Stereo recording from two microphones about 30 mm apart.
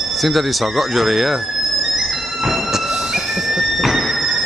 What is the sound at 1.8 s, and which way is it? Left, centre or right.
Music, centre.